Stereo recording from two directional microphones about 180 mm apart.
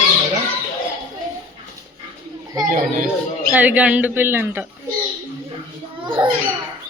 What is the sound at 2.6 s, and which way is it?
Speech, 45° right (ahead or behind).